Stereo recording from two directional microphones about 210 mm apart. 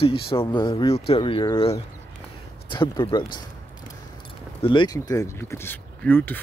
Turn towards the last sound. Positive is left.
turn(degrees=10)  # may be behind; listen again after turning